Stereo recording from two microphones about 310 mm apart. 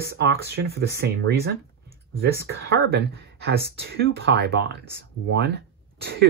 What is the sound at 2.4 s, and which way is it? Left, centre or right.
Speech, right.